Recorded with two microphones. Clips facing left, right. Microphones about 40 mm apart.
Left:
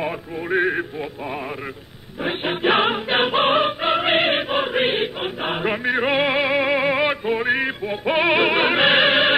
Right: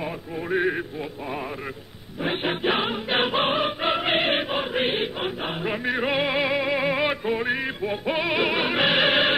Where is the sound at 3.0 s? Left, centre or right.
Centre.